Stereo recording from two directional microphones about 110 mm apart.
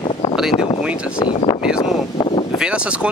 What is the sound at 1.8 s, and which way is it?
Speech, 50° left (ahead or behind).